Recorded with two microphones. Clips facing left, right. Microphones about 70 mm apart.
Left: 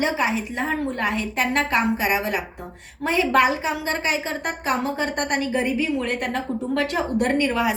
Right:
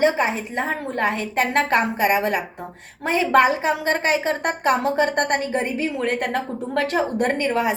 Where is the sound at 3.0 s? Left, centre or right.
Right.